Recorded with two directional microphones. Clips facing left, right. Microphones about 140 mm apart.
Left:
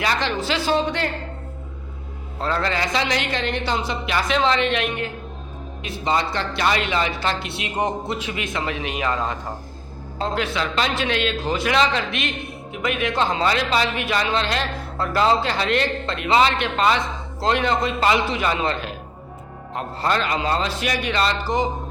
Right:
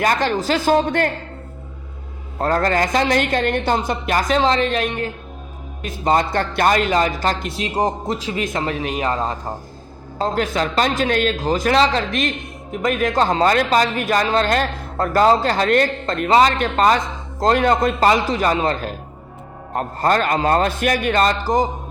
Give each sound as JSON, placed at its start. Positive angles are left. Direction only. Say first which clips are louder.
{"t": 0.0, "sound": "speech", "louder": "right 5 dB", "side_deg": -45}
{"t": 2.4, "sound": "a man's voice", "louder": "right 5 dB", "side_deg": -45}